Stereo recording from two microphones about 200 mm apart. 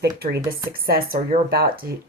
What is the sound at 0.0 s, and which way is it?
Speech, 55° right (ahead or behind).